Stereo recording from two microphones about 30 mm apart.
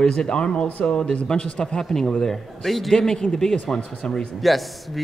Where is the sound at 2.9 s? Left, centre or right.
Left.